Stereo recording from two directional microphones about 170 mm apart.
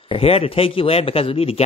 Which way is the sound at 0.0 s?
35° left (ahead or behind).